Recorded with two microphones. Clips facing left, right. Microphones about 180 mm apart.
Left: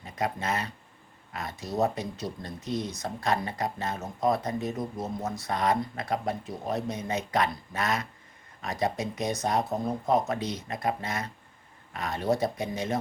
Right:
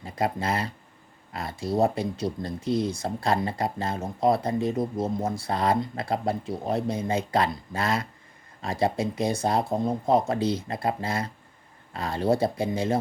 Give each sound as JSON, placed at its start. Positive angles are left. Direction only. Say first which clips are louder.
{"t": 0.0, "sound": "speech", "louder": "right 4 dB", "side_deg": -30}